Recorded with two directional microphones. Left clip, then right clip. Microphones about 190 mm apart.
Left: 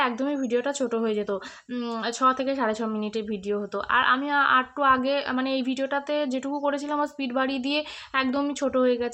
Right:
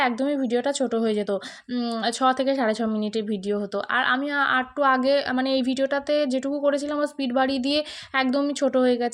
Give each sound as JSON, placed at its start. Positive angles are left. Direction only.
{"t": 0.0, "sound": "a woman's voice", "side_deg": -15}